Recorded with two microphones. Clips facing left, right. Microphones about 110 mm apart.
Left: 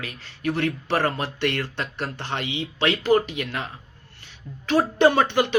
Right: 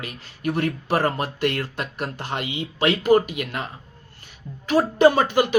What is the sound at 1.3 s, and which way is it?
Speech, 40° right (ahead or behind).